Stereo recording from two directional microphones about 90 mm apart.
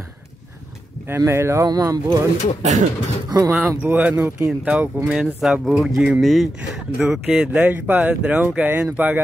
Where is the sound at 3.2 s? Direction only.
45° right (ahead or behind).